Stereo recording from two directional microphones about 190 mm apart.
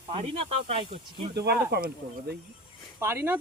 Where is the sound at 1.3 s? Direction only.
60° right (ahead or behind).